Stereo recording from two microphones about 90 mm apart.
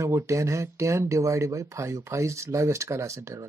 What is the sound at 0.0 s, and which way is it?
Speech, 35° right (ahead or behind).